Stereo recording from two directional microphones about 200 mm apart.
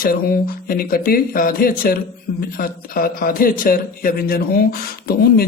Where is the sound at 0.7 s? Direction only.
45° left (ahead or behind).